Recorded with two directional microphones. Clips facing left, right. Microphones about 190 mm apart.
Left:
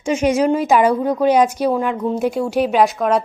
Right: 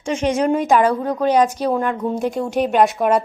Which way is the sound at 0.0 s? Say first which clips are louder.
Left 3 dB; 10° left (ahead or behind).